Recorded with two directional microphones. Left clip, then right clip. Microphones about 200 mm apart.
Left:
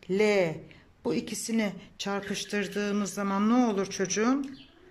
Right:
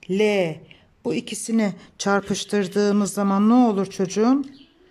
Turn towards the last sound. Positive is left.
turn(degrees=-20)  # may be behind; listen again after turning